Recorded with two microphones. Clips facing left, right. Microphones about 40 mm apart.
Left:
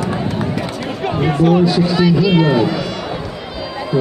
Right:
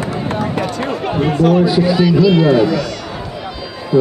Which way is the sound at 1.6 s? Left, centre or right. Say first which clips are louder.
Right 1 dB; centre.